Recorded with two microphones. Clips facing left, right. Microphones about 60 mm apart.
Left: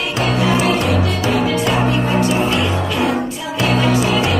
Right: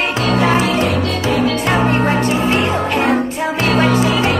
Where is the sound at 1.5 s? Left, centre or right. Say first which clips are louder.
Right 2 dB; right.